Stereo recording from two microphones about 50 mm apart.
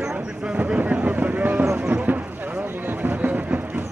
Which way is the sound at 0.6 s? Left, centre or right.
Right.